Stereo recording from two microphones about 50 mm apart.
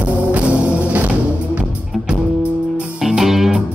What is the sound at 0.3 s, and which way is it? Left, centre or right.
Music, right.